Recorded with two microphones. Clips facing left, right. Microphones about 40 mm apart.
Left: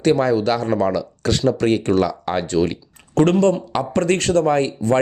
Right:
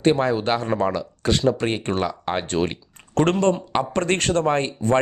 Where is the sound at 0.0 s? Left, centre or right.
Right.